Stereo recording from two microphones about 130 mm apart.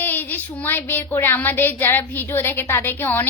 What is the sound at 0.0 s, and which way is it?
Speech, 15° left (ahead or behind).